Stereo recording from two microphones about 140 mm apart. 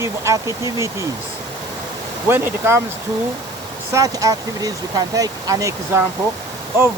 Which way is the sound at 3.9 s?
25° right (ahead or behind).